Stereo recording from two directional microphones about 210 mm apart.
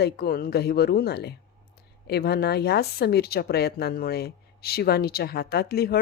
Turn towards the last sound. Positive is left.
turn(degrees=45)  # may be behind; listen again after turning